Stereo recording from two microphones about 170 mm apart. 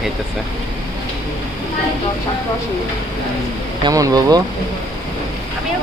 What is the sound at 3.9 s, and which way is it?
Speech, 20° right (ahead or behind).